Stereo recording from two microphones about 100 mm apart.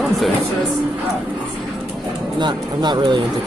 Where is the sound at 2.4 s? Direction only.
50° right (ahead or behind).